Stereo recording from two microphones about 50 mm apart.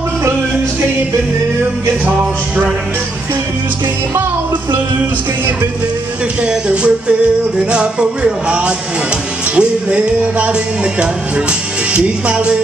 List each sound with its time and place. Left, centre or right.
2.0 s music: right
6.4 s music: right